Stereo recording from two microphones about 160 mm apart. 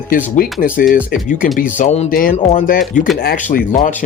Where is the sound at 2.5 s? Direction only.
55° left (ahead or behind).